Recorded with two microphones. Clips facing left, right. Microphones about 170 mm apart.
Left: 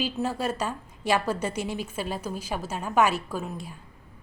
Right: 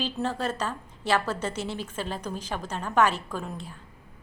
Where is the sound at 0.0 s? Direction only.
10° left (ahead or behind).